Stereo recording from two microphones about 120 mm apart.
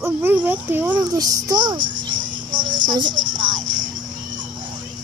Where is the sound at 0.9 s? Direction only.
35° right (ahead or behind).